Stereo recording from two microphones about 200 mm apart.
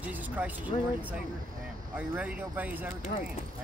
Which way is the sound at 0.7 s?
35° left (ahead or behind).